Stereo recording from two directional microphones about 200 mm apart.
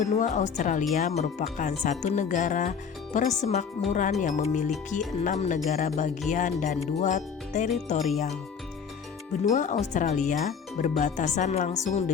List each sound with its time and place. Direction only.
0.0 s speech: 35° left (ahead or behind)
9.5 s speech: 35° left (ahead or behind)